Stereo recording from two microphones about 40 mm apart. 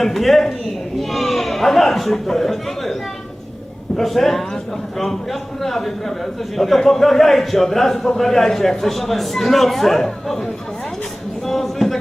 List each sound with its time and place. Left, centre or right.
0.0 s speech: centre
3.9 s a man's voice: centre